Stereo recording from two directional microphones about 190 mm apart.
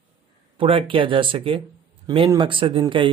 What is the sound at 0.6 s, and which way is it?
Speech, 30° right (ahead or behind).